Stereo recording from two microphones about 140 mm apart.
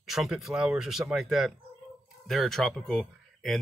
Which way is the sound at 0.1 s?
5° right (ahead or behind).